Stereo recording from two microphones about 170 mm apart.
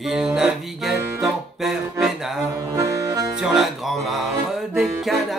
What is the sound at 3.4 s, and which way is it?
Music, centre (ahead or behind).